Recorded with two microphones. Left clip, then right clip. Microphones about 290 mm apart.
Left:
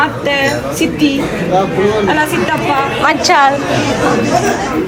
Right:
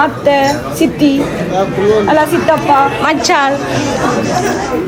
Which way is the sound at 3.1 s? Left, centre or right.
Centre.